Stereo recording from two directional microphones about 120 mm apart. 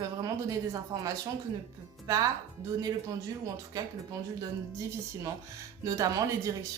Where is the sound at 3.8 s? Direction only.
30° right (ahead or behind).